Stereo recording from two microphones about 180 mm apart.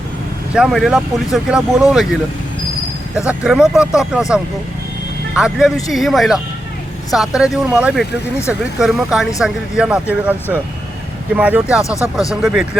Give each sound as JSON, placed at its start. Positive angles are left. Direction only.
{"t": 0.5, "sound": "speech", "side_deg": 0}
{"t": 3.2, "sound": "speech", "side_deg": -5}
{"t": 5.3, "sound": "speech", "side_deg": -5}
{"t": 11.8, "sound": "speech", "side_deg": 15}
{"t": 12.3, "sound": "speech", "side_deg": -5}